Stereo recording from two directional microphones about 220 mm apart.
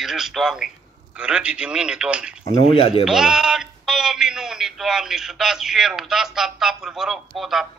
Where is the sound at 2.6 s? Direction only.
25° left (ahead or behind).